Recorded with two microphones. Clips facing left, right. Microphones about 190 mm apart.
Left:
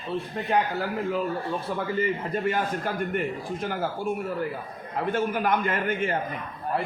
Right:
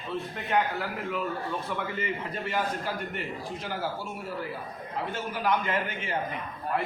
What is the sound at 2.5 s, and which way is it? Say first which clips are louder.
A man's voice: left 3 dB; 50° left (ahead or behind).